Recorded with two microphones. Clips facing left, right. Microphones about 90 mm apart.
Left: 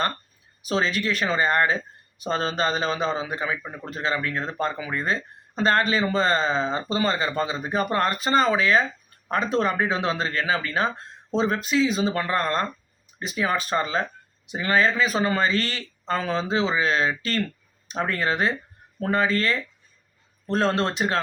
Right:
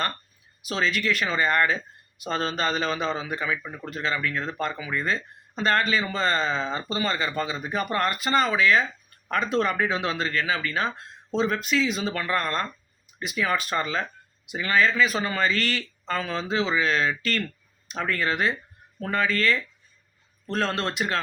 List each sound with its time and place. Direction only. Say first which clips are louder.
0.6 s speech: left 2 dB; 30° left (ahead or behind)